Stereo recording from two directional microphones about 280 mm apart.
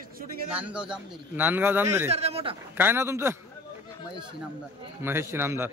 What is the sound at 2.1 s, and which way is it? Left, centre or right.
Speech, right.